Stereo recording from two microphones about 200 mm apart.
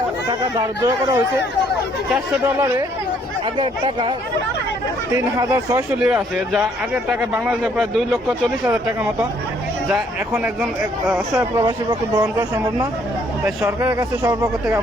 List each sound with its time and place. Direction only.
0.8 s speech: 15° right (ahead or behind)
3.6 s speech: 25° right (ahead or behind)
5.1 s a man's voice: 15° right (ahead or behind)
9.9 s speech: 10° right (ahead or behind)